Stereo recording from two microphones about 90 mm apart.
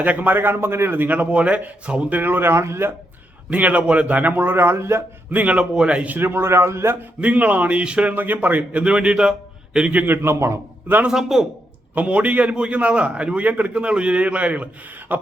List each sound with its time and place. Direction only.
0.0 s a man's voice: 20° right (ahead or behind)
3.5 s a man's voice: 15° right (ahead or behind)
5.3 s a man's voice: 15° right (ahead or behind)
7.2 s a man's voice: 15° right (ahead or behind); by 10.6 s 30° right (ahead or behind)
10.8 s a man's voice: 20° right (ahead or behind)
11.1 s a man's voice: 5° right (ahead or behind)
11.9 s a man's voice: 15° right (ahead or behind)